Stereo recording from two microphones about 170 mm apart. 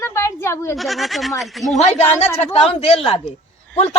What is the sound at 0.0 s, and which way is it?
Bleat, 15° left (ahead or behind).